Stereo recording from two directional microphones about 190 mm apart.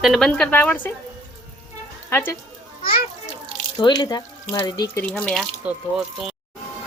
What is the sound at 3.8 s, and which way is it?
Speech, 20° left (ahead or behind).